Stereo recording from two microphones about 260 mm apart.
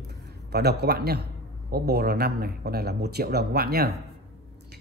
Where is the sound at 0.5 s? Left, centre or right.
Right.